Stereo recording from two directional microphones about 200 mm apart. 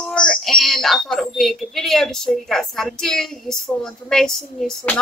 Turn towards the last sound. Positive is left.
turn(degrees=0)  # may be behind; listen again after turning